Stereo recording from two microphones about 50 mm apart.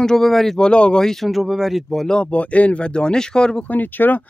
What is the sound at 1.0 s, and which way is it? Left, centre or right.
Speech, centre.